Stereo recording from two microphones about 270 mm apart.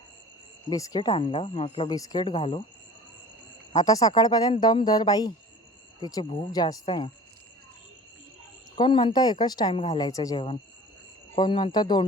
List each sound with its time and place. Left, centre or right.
0.7 s speech: centre
3.7 s speech: centre
8.7 s speech: centre